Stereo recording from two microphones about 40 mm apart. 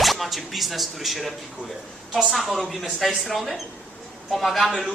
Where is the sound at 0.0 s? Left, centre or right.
Centre.